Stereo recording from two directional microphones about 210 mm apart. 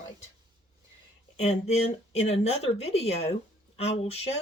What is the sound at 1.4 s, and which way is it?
Speech, 30° left (ahead or behind).